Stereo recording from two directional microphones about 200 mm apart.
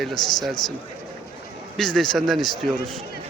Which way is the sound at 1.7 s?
Centre (ahead or behind).